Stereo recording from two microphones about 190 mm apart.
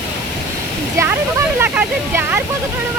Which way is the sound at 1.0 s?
15° right (ahead or behind).